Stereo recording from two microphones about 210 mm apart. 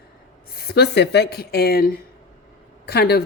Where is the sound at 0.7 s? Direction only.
55° left (ahead or behind).